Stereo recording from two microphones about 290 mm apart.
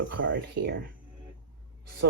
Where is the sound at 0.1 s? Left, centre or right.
Right.